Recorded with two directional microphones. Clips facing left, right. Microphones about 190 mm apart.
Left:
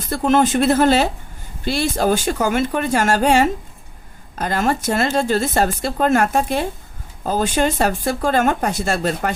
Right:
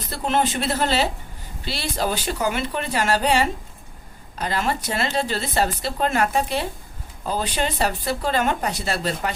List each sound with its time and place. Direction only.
0.1 s speech: 45° left (ahead or behind)